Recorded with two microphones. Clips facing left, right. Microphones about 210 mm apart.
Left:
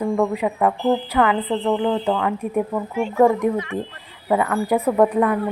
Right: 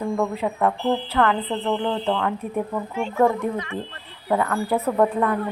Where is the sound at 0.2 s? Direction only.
10° left (ahead or behind).